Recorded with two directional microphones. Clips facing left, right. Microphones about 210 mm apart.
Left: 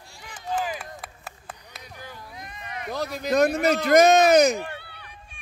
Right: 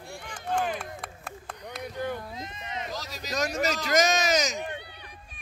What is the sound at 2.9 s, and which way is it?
Speech, 60° left (ahead or behind).